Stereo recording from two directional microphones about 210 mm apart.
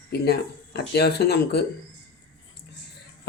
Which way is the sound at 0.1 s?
50° left (ahead or behind).